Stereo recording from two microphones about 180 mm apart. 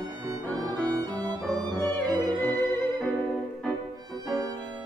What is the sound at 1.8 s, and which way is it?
Music, 10° left (ahead or behind).